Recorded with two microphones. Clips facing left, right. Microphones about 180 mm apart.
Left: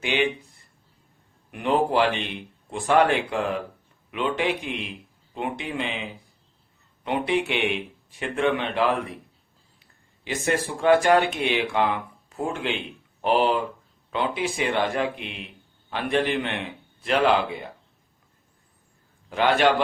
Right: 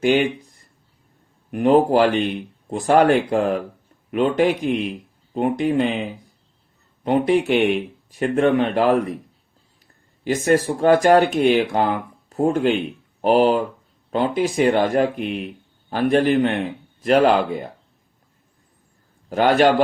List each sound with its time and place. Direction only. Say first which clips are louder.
0.0 s a man's voice: right 7 dB; 40° right (ahead or behind)
19.3 s a man's voice: right 5 dB; 45° right (ahead or behind)